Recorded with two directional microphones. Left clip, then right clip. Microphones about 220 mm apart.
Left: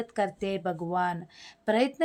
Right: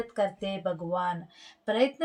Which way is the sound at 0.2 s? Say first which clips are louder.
Even; 25° left (ahead or behind).